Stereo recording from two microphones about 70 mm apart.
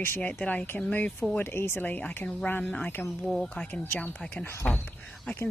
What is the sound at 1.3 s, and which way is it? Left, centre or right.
Speech, left.